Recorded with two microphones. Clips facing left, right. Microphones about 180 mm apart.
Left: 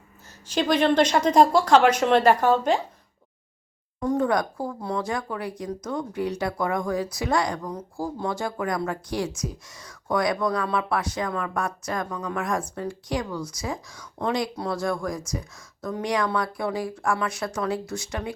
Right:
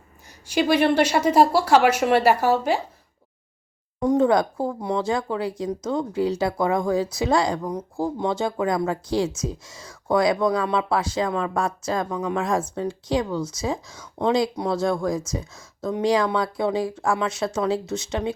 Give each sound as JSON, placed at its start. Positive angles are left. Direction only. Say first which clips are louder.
{"t": 0.4, "sound": "speech", "louder": "right 2 dB", "side_deg": -10}
{"t": 4.0, "sound": "speech", "louder": "right 5 dB", "side_deg": -20}